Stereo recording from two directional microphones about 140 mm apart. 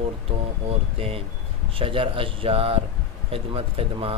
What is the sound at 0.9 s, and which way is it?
Speech, 45° right (ahead or behind).